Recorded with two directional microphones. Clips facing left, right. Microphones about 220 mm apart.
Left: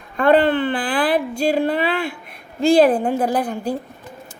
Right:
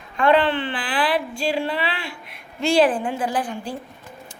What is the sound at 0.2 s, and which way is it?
Speech, 45° left (ahead or behind).